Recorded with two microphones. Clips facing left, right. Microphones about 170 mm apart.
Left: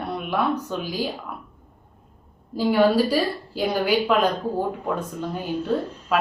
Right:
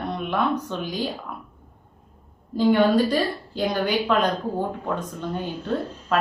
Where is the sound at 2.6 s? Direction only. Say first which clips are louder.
Even; 10° left (ahead or behind).